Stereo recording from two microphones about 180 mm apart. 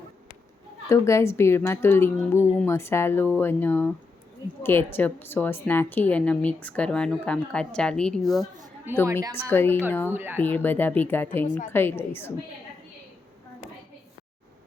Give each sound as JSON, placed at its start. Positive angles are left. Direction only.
{"t": 0.9, "sound": "a woman's voice", "side_deg": 15}
{"t": 9.3, "sound": "a woman's voice", "side_deg": 10}
{"t": 10.1, "sound": "speech", "side_deg": -10}
{"t": 10.3, "sound": "a woman's voice", "side_deg": 10}
{"t": 11.4, "sound": "a woman's voice", "side_deg": 45}
{"t": 11.7, "sound": "a woman's voice", "side_deg": 10}